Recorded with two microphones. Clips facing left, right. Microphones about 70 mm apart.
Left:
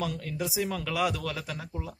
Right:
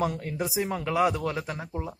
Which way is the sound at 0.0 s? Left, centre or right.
Right.